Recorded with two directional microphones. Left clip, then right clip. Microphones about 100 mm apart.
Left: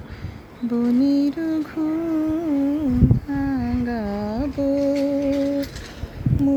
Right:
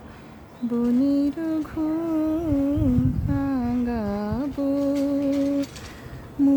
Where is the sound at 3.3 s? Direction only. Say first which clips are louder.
Left 1 dB; 40° right (ahead or behind).